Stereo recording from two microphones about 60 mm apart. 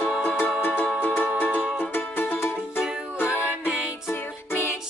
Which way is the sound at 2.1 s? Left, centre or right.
Left.